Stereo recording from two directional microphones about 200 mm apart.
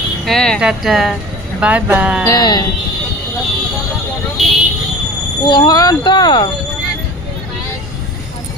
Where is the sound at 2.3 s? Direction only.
20° left (ahead or behind).